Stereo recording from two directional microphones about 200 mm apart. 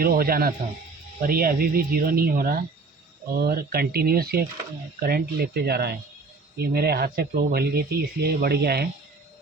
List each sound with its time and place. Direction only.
0.0 s speech: 50° right (ahead or behind)